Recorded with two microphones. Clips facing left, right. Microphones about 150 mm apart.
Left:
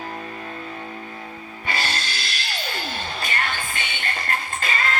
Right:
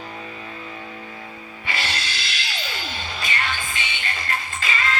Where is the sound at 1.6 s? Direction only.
40° left (ahead or behind).